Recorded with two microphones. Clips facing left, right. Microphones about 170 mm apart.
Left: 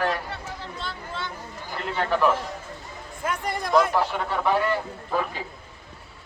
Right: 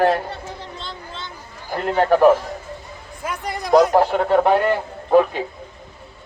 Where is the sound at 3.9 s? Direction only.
50° right (ahead or behind).